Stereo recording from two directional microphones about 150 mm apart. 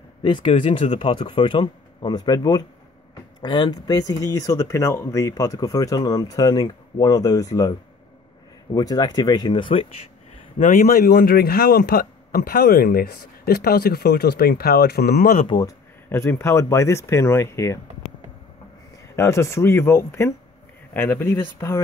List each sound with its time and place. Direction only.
0.2 s speech: 35° left (ahead or behind)
8.7 s speech: 25° left (ahead or behind)
10.6 s speech: 65° left (ahead or behind); by 15.4 s 85° left
15.4 s speech: 30° left (ahead or behind)
16.1 s speech: 15° left (ahead or behind)
19.1 s speech: 20° left (ahead or behind)